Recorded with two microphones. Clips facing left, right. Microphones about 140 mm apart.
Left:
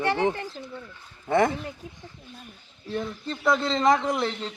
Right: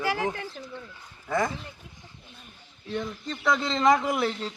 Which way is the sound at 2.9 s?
5° left (ahead or behind).